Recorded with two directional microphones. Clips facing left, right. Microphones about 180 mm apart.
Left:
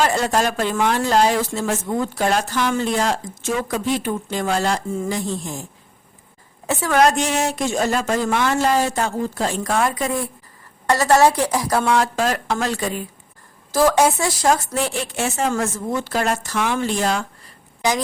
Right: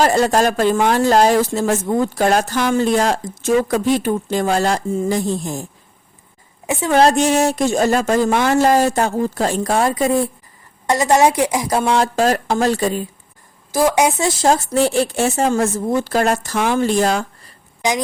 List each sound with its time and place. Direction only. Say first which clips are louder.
0.0 s speech: right 4 dB; 40° right (ahead or behind)
6.7 s speech: right 3 dB; 25° right (ahead or behind)
10.8 s a woman's voice: right 1 dB; 15° right (ahead or behind); by 13.1 s 35° right (ahead or behind)
13.7 s speech: right 1 dB; 15° right (ahead or behind); by 17.2 s 40° right (ahead or behind)